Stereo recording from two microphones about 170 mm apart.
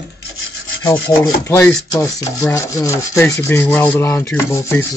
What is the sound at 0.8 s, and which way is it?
Rub, 15° left (ahead or behind).